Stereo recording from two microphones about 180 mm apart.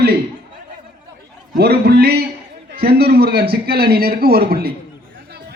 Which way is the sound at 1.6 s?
65° right (ahead or behind).